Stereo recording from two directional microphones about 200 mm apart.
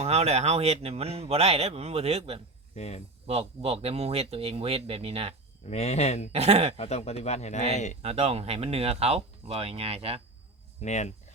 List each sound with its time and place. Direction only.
0.0 s speech: 30° right (ahead or behind)
2.7 s speech: 35° left (ahead or behind)
3.2 s speech: 30° right (ahead or behind)
5.6 s speech: 35° left (ahead or behind)
6.3 s speech: 30° right (ahead or behind)
6.7 s speech: 30° left (ahead or behind)
8.0 s speech: 30° right (ahead or behind)
10.8 s speech: 35° left (ahead or behind)